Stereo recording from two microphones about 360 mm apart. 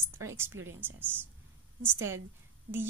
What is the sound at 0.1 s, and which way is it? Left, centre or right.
A woman's voice, centre.